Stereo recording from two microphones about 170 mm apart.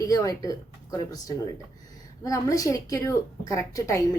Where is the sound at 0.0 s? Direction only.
20° left (ahead or behind).